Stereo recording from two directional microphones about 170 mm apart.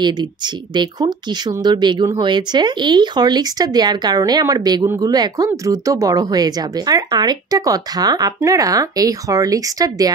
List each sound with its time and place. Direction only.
0.7 s speech: 25° right (ahead or behind)